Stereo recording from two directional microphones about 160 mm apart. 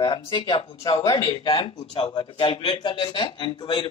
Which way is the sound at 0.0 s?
30° left (ahead or behind).